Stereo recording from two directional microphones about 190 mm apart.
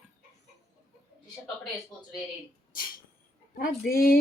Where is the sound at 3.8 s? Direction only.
50° left (ahead or behind).